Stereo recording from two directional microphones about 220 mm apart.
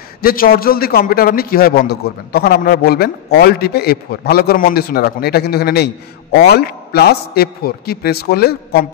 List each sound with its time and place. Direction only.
0.2 s a man's voice: 40° left (ahead or behind)